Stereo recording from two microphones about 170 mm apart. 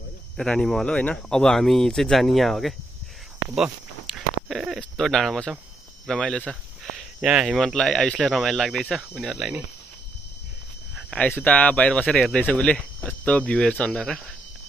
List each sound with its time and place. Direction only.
0.4 s speech: 5° left (ahead or behind)
11.1 s speech: 10° left (ahead or behind)